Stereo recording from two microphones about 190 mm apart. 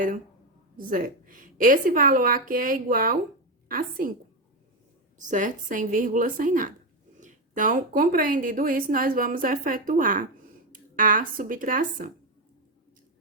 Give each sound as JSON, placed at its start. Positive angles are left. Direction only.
{"t": 0.8, "sound": "a woman's voice", "side_deg": -45}
{"t": 5.1, "sound": "a woman's voice", "side_deg": -40}